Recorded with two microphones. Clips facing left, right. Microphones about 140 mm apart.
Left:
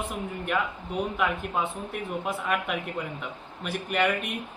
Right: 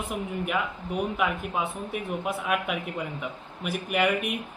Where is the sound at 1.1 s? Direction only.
5° right (ahead or behind).